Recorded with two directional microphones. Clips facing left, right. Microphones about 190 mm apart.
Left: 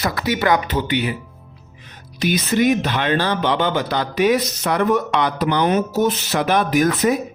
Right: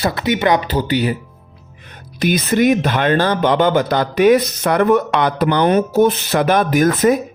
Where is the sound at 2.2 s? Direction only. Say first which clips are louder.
Right 3 dB; 50° right (ahead or behind).